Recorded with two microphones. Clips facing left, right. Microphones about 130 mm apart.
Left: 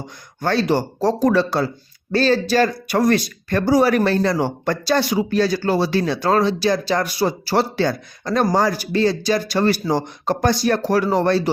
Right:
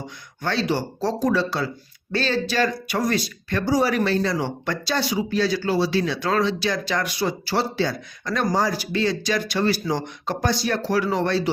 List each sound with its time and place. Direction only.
0.4 s speech: 45° left (ahead or behind)
1.2 s speech: 55° left (ahead or behind)
3.7 s speech: 60° left (ahead or behind); by 7.5 s 40° left (ahead or behind)
7.5 s speech: 55° left (ahead or behind)
8.2 s speech: 35° left (ahead or behind)